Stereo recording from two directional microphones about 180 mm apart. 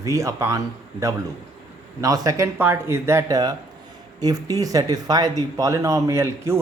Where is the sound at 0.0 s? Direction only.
15° right (ahead or behind).